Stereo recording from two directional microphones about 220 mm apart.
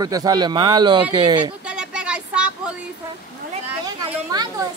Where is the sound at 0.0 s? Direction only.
15° right (ahead or behind).